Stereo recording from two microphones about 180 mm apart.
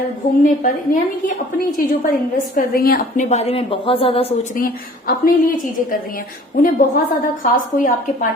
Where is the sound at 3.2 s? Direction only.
35° left (ahead or behind).